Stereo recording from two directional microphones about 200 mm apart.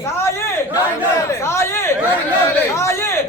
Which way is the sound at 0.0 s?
15° left (ahead or behind).